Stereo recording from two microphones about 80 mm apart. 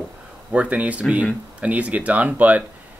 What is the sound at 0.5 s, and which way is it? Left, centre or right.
Speech, centre.